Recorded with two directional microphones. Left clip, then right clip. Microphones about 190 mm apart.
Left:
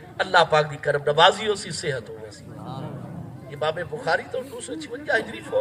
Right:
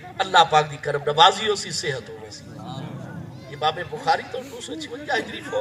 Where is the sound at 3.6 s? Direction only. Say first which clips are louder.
Right 2 dB; 20° right (ahead or behind).